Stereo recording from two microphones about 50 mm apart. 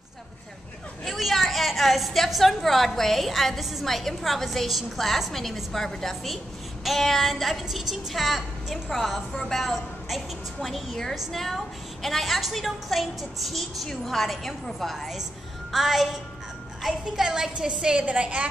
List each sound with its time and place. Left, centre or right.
1.0 s a woman's voice: centre; by 18.5 s right